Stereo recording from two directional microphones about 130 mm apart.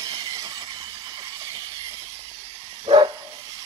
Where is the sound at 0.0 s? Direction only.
30° right (ahead or behind).